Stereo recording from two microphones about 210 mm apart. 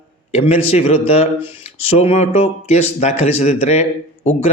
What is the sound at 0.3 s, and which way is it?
A man's voice, 30° left (ahead or behind).